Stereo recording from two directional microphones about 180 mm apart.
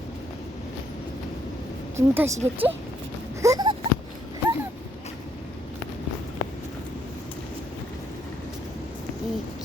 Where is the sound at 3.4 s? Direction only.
20° right (ahead or behind).